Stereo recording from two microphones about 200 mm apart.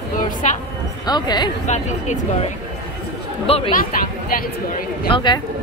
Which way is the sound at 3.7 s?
45° left (ahead or behind).